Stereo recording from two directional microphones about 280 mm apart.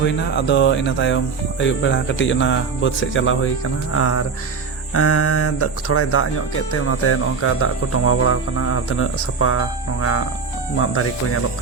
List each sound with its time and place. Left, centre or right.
0.0 s speech: left